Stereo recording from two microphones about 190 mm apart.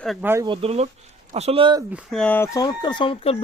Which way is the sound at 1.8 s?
5° right (ahead or behind).